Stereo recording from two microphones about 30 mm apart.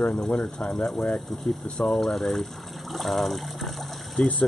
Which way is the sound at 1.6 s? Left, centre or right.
Left.